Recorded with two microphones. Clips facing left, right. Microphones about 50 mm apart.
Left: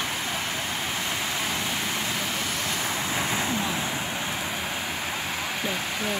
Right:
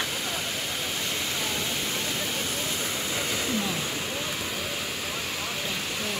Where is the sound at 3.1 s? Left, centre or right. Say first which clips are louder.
Left 1 dB; left.